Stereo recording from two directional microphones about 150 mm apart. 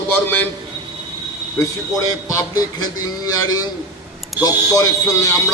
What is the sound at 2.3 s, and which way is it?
A man's voice, 25° left (ahead or behind).